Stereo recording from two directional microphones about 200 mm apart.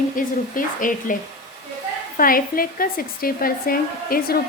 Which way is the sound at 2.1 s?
45° left (ahead or behind).